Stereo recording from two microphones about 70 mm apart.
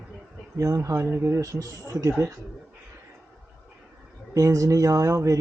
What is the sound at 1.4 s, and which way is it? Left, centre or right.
Speech, right.